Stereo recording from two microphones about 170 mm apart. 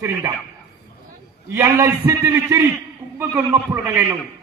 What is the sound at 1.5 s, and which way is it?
A man's voice, 15° right (ahead or behind).